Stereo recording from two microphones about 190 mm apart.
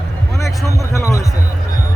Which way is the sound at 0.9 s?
15° left (ahead or behind).